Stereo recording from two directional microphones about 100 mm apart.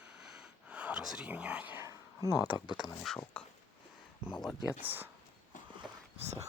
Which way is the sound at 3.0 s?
10° left (ahead or behind).